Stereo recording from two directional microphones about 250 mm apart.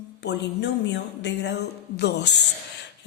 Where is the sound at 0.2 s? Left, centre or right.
Left.